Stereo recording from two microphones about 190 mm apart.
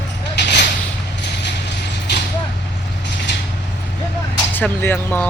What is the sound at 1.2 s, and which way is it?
Horse, 60° left (ahead or behind).